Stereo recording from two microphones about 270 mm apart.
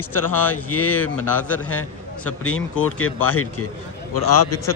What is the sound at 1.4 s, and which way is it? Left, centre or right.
Speech, centre.